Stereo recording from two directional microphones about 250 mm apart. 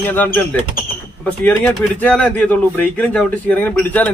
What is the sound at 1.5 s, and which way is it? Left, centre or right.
Speech, centre.